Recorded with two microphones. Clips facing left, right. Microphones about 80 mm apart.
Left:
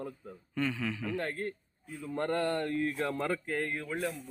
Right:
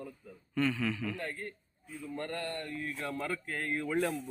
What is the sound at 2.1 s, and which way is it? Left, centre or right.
Speech, left.